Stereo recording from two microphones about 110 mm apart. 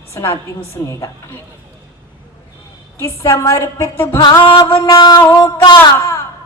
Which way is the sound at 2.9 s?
30° left (ahead or behind).